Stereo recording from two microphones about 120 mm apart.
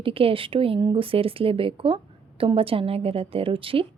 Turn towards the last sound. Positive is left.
turn(degrees=-50)  # may be behind; listen again after turning